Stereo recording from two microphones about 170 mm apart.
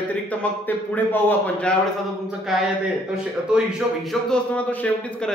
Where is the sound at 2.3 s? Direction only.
Centre (ahead or behind).